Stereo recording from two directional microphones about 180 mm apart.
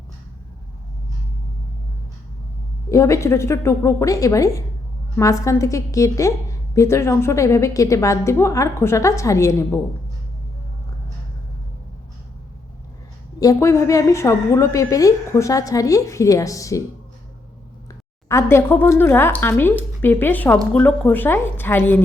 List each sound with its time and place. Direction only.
2.9 s a woman's voice: 15° left (ahead or behind)
13.4 s a woman's voice: 20° left (ahead or behind)
18.3 s a woman's voice: 15° left (ahead or behind)